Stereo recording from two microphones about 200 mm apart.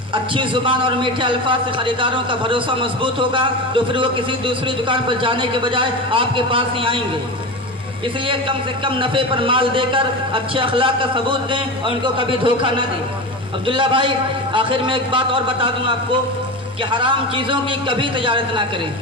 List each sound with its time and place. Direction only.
0.1 s a man's voice: 25° right (ahead or behind)
8.3 s a man's voice: 25° right (ahead or behind)